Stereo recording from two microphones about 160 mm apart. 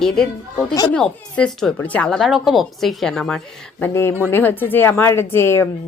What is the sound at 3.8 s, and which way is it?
A woman's voice, 15° left (ahead or behind).